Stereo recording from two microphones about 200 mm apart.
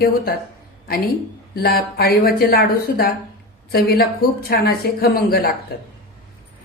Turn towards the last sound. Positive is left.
turn(degrees=45)  # may be behind; listen again after turning